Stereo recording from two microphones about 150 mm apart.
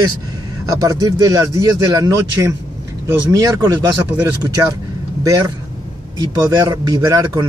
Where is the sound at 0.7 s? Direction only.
25° right (ahead or behind).